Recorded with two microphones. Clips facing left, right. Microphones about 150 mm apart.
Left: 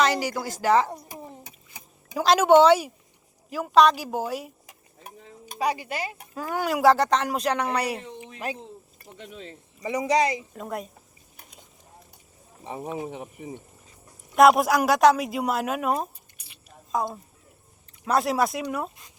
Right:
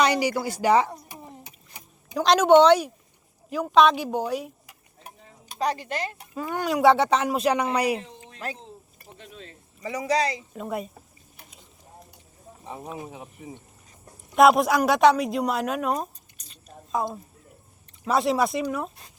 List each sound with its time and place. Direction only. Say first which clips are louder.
0.0 s a woman's voice: right 2 dB; 10° right (ahead or behind)
2.1 s speech: right 1 dB; 5° left (ahead or behind)
5.5 s speech: even; 10° left (ahead or behind); by 8.0 s 10° right (ahead or behind)
8.2 s cricket: left 2 dB; 15° left (ahead or behind)
9.8 s speech: left 2 dB; 20° left (ahead or behind)
10.5 s speech: right 2 dB; 5° right (ahead or behind)
14.3 s speech: even; centre (ahead or behind)